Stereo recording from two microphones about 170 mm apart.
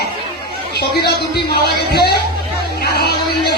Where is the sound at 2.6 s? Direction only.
65° left (ahead or behind).